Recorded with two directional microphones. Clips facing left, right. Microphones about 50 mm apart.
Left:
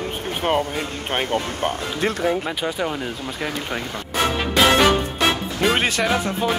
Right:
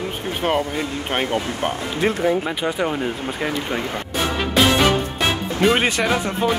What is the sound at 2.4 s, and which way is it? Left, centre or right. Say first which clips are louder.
Speech: right 2 dB; centre.